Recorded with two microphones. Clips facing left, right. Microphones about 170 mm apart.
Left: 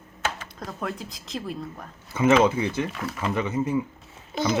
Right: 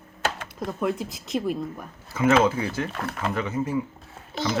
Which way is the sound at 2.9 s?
55° right (ahead or behind).